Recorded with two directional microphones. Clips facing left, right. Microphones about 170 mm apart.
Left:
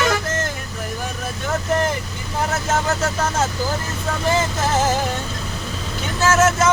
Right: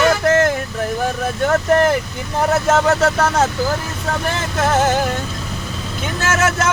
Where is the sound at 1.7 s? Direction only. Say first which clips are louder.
Right 5 dB; 60° right (ahead or behind).